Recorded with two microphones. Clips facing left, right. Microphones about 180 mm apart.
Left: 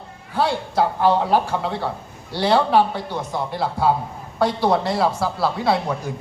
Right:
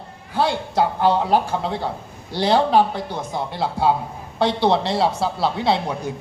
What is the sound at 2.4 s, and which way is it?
A man's voice, 20° right (ahead or behind).